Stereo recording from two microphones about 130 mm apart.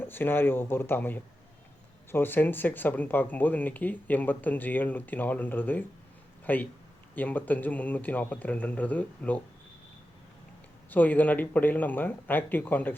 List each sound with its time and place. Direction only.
0.0 s speech: 15° left (ahead or behind)
10.8 s speech: 15° left (ahead or behind)